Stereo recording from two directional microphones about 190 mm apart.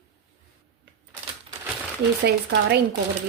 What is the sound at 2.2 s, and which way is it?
Speech, 55° right (ahead or behind).